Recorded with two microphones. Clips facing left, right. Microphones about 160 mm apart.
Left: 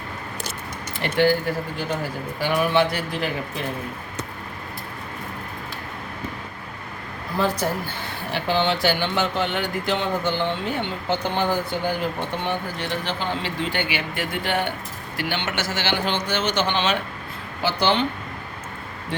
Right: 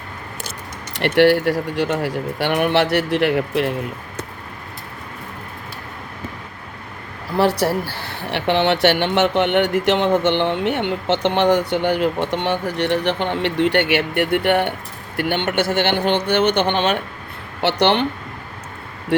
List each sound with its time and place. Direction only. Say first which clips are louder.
0.9 s speech: right 6 dB; 70° right (ahead or behind)
7.3 s a man's voice: right 6 dB; 70° right (ahead or behind); by 17.0 s 55° right (ahead or behind)
17.6 s speech: right 5 dB; 70° right (ahead or behind)